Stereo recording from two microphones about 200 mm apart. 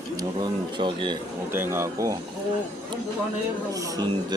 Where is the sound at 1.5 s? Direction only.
10° right (ahead or behind).